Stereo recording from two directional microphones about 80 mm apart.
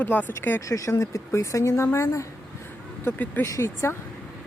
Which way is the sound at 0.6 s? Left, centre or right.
Left.